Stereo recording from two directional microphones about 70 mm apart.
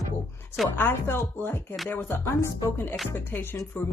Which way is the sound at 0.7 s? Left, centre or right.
Left.